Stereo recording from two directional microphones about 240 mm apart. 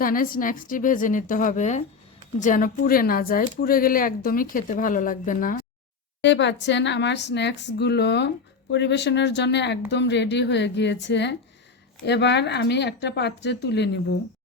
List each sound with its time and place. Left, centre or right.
0.0 s speech: left
6.2 s speech: left